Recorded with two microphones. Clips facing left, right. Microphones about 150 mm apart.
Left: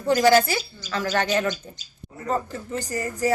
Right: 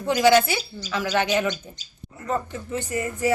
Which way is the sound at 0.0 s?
Centre (ahead or behind).